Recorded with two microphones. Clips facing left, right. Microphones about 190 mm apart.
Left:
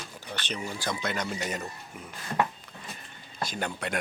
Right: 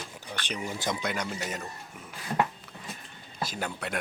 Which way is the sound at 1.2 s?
Centre (ahead or behind).